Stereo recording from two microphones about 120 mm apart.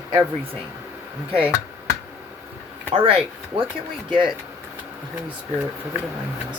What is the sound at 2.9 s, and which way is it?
Speech, 50° right (ahead or behind).